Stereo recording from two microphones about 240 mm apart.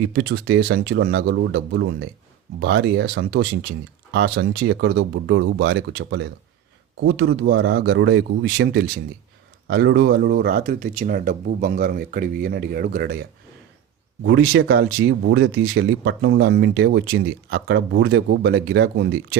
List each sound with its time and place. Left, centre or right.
0.0 s speech: right
14.3 s speech: right